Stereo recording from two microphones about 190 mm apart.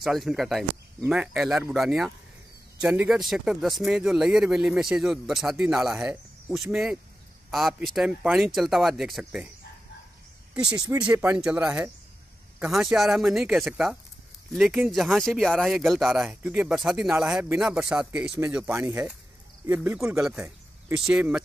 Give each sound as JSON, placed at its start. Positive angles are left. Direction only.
{"t": 0.0, "sound": "speech", "side_deg": 0}
{"t": 10.5, "sound": "speech", "side_deg": -5}